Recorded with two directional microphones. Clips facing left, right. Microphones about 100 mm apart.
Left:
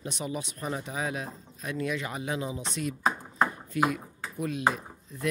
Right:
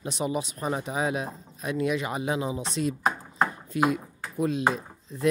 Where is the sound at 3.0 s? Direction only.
15° right (ahead or behind).